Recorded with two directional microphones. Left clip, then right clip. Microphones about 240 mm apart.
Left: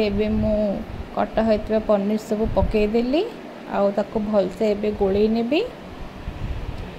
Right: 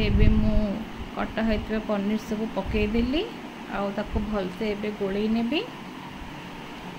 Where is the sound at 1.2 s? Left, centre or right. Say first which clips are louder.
Left 8 dB; centre.